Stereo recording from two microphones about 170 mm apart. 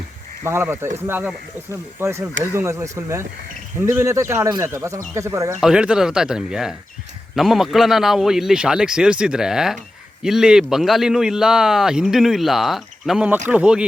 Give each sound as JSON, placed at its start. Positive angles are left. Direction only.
{"t": 0.4, "sound": "speech", "side_deg": -15}
{"t": 5.5, "sound": "a man's voice", "side_deg": -5}